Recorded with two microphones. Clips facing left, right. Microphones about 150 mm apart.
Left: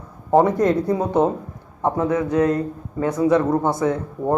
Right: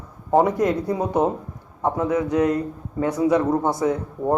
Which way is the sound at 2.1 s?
15° right (ahead or behind).